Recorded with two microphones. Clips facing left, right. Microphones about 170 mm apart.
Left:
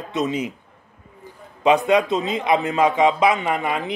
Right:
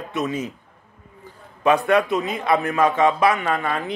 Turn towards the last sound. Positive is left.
turn(degrees=15)  # may be behind; listen again after turning